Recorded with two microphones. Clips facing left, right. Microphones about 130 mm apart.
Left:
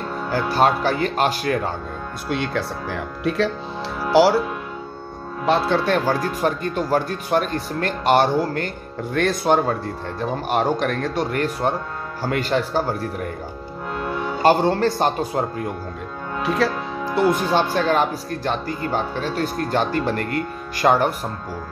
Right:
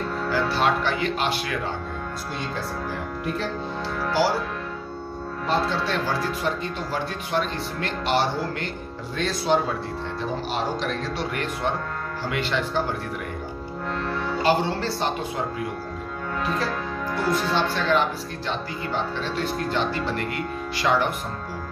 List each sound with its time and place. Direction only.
0.3 s speech: 45° left (ahead or behind)
2.2 s speech: 75° left (ahead or behind); by 4.4 s 90° left
5.5 s speech: 55° left (ahead or behind); by 12.9 s 40° left (ahead or behind)
13.9 s music: 10° left (ahead or behind)
14.4 s speech: 45° left (ahead or behind)
16.4 s music: 80° left
17.7 s speech: 45° left (ahead or behind)